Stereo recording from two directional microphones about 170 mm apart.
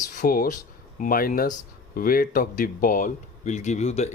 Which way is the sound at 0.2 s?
55° left (ahead or behind).